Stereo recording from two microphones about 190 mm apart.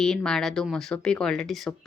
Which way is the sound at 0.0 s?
5° left (ahead or behind).